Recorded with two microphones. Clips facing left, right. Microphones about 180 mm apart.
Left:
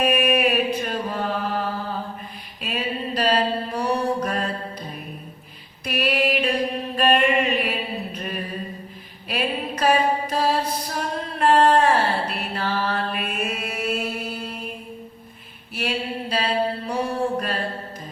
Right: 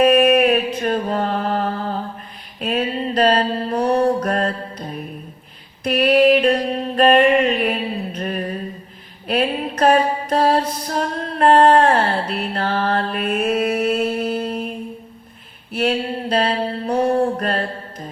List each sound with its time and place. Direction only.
0.0 s mantra: 50° right (ahead or behind)
5.8 s a sound: 50° right (ahead or behind)
9.2 s mantra: 50° right (ahead or behind)
15.7 s mantra: 50° right (ahead or behind)